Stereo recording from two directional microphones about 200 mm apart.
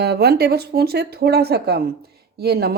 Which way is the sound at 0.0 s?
55° right (ahead or behind).